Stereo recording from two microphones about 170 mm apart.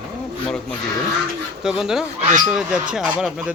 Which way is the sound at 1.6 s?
5° right (ahead or behind).